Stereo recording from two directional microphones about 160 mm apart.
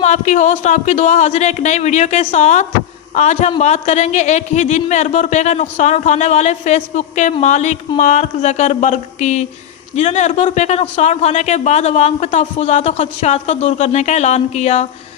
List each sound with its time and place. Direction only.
0.0 s a man's voice: 50° left (ahead or behind)